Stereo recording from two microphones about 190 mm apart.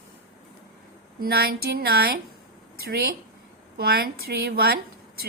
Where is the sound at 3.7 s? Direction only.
55° right (ahead or behind).